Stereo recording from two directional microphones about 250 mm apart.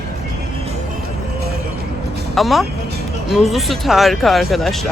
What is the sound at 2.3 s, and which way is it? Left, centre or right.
Speech, centre.